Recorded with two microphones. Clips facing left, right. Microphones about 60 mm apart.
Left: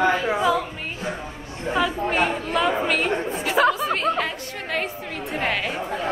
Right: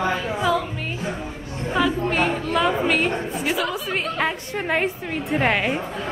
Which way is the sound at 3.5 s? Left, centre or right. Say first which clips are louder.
Left 6 dB; left.